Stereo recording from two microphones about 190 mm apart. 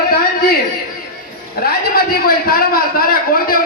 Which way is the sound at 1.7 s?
55° left (ahead or behind).